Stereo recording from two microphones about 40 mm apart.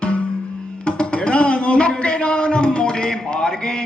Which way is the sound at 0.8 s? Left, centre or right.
Left.